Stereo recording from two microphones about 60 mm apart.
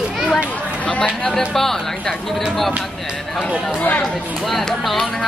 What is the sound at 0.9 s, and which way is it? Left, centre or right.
Speech, centre.